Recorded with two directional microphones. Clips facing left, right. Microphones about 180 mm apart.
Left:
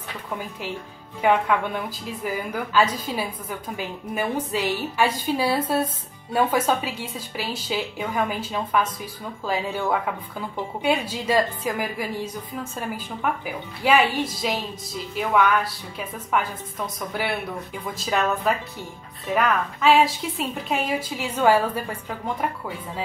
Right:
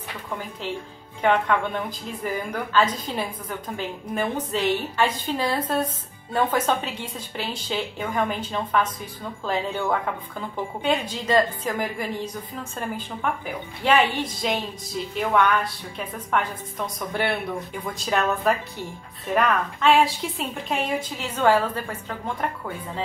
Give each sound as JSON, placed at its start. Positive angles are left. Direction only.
{"t": 1.2, "sound": "a woman's voice", "side_deg": 10}